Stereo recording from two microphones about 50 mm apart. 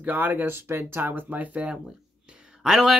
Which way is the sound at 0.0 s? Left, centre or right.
Right.